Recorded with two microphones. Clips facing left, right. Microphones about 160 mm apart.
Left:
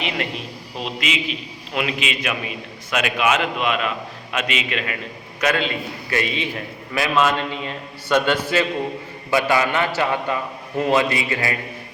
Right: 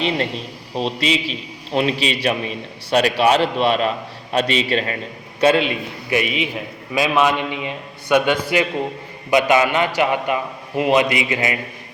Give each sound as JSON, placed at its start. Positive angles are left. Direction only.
{"t": 0.8, "sound": "a man's voice", "side_deg": -35}
{"t": 5.6, "sound": "a man's voice", "side_deg": -15}